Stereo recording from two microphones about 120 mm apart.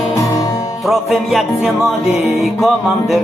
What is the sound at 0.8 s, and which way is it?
Speech, centre (ahead or behind).